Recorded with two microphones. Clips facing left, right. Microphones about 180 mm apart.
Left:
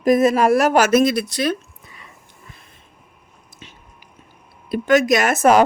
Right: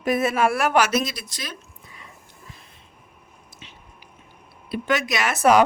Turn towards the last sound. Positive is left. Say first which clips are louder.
# left 4 dB
turn(degrees=45)  # may be behind; listen again after turning